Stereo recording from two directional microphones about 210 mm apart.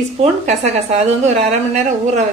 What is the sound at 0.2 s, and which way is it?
A woman's voice, 30° right (ahead or behind).